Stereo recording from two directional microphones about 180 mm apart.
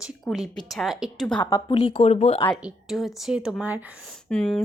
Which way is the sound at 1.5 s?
20° left (ahead or behind).